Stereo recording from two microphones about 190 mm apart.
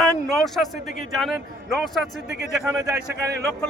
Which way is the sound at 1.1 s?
Centre (ahead or behind).